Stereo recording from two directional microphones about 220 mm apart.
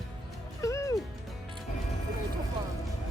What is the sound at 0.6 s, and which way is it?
Music, 15° left (ahead or behind).